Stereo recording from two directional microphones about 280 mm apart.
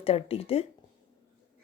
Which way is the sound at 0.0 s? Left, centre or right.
Left.